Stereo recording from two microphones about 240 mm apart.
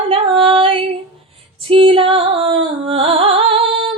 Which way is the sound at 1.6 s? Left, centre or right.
Right.